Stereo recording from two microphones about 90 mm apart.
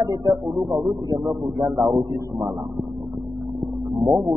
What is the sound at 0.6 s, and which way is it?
Speech, 10° right (ahead or behind).